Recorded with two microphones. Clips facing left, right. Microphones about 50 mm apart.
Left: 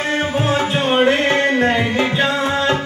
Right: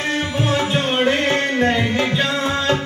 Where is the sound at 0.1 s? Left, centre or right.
Left.